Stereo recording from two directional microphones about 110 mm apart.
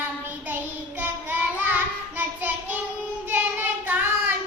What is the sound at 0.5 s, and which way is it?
Child singing, 15° right (ahead or behind).